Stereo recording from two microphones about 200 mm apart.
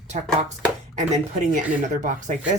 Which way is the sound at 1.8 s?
40° right (ahead or behind).